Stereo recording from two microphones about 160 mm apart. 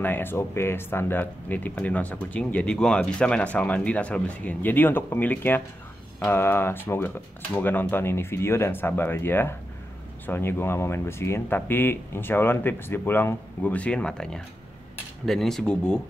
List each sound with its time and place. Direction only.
0.0 s speech: 15° left (ahead or behind)
15.2 s cutlery: centre (ahead or behind)